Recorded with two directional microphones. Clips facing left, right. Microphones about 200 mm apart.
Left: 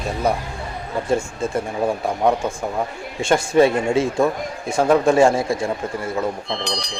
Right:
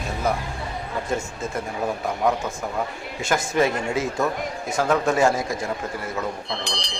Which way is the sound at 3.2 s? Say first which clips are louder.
Left 6 dB; 30° left (ahead or behind).